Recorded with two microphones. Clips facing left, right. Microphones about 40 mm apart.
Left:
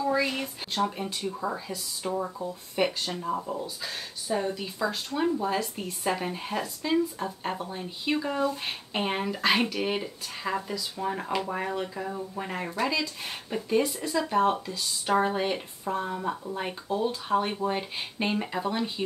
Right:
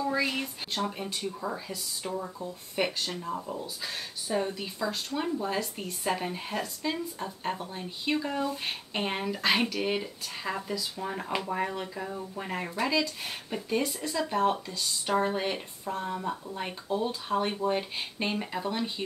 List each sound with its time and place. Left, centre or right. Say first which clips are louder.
0.0 s speech: left 2 dB; centre
2.1 s speech: left 5 dB; centre
2.7 s speech: left 2 dB; centre
3.6 s speech: left 1 dB; centre